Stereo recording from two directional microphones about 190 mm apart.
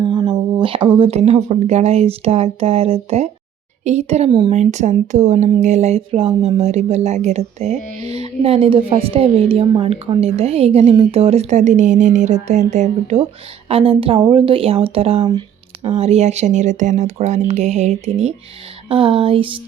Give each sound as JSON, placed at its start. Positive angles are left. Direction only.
{"t": 0.0, "sound": "speech", "side_deg": -25}
{"t": 4.5, "sound": "speech", "side_deg": -35}
{"t": 18.9, "sound": "a sound", "side_deg": -30}